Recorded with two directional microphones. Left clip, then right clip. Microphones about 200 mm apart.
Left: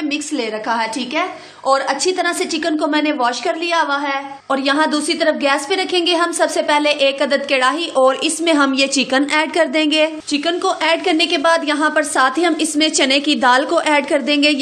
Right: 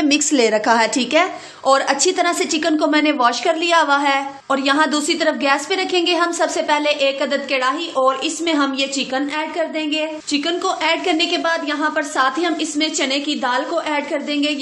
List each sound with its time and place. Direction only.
0.1 s a woman's voice: 30° right (ahead or behind)
1.7 s a woman's voice: 10° right (ahead or behind)
4.5 s a woman's voice: 5° left (ahead or behind); by 10.0 s 40° left (ahead or behind)
10.3 s a woman's voice: 15° left (ahead or behind); by 14.6 s 40° left (ahead or behind)